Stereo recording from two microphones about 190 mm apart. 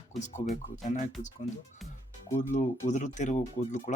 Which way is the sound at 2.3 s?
35° left (ahead or behind).